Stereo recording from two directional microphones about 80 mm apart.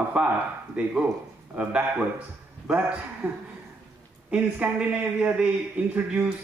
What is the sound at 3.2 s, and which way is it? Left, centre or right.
Speech, right.